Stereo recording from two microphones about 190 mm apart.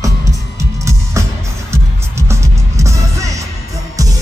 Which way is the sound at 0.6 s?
15° right (ahead or behind).